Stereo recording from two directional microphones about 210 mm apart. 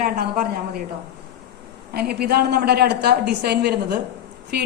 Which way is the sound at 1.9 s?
50° right (ahead or behind).